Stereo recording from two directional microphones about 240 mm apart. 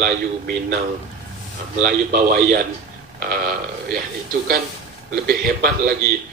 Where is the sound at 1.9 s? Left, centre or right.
Right.